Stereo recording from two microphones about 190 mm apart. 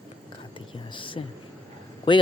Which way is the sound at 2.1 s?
25° left (ahead or behind).